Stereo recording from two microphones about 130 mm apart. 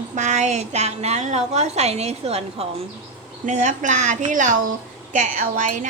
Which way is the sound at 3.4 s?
65° right (ahead or behind).